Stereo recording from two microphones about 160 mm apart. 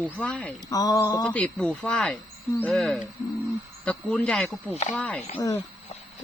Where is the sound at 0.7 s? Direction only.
20° left (ahead or behind).